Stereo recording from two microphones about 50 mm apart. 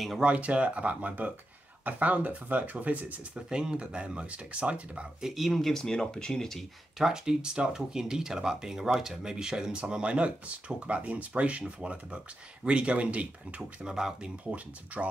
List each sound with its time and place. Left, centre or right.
0.2 s speech: right
3.3 s speech: centre
5.2 s speech: centre
7.0 s speech: centre; by 13.6 s right
13.6 s speech: centre